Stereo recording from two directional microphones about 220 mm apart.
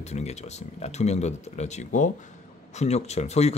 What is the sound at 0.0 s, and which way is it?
Speech, 30° left (ahead or behind).